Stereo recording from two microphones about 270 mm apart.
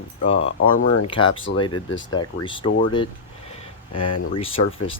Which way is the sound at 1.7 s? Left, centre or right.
Left.